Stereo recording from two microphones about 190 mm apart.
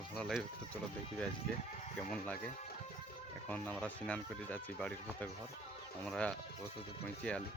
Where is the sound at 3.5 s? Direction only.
5° left (ahead or behind).